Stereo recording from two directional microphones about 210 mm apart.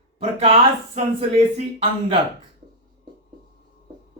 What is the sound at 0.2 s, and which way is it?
Speech, 30° right (ahead or behind).